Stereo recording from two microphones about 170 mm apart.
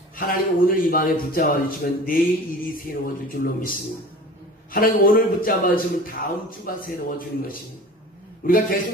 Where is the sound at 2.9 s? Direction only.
60° left (ahead or behind).